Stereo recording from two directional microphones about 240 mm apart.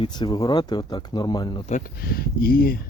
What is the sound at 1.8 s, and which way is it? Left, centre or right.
Speech, left.